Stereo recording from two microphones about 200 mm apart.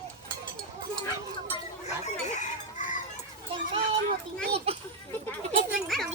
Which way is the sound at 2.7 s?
40° left (ahead or behind).